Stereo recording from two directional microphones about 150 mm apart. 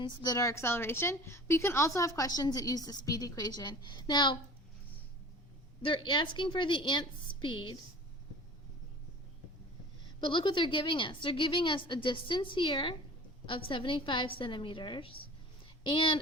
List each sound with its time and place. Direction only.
0.0 s a woman's voice: 30° left (ahead or behind)
5.8 s a woman's voice: 35° left (ahead or behind)
10.2 s a woman's voice: 35° left (ahead or behind)